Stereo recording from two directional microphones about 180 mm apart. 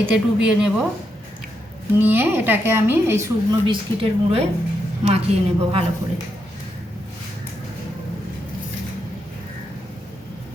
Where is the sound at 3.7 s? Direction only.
30° right (ahead or behind).